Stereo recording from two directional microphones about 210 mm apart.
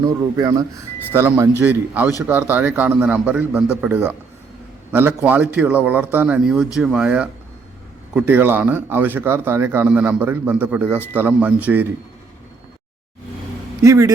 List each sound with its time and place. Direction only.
0.0 s speech: 15° right (ahead or behind)
13.8 s speech: 15° right (ahead or behind)